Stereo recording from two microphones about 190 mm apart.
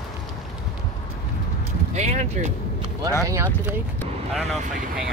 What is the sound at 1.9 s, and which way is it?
Speech, 35° right (ahead or behind).